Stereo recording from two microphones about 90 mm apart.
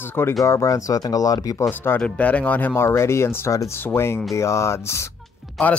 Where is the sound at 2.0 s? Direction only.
15° left (ahead or behind); by 5.1 s 30° left (ahead or behind).